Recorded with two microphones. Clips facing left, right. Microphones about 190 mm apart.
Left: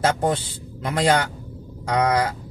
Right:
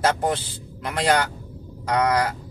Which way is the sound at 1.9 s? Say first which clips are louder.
Left 1 dB; 25° left (ahead or behind).